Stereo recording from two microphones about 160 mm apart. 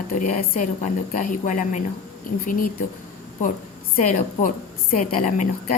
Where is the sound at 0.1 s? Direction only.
60° left (ahead or behind).